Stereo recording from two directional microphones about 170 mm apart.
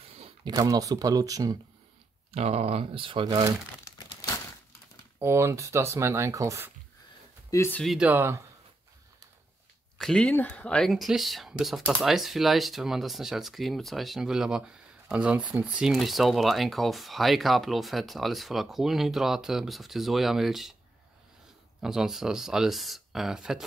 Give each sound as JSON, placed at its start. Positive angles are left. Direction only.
{"t": 0.5, "sound": "speech", "side_deg": -20}
{"t": 2.3, "sound": "speech", "side_deg": -35}
{"t": 5.2, "sound": "speech", "side_deg": -15}
{"t": 7.5, "sound": "speech", "side_deg": 15}
{"t": 7.8, "sound": "speech", "side_deg": -5}
{"t": 9.9, "sound": "speech", "side_deg": 5}
{"t": 21.8, "sound": "speech", "side_deg": -5}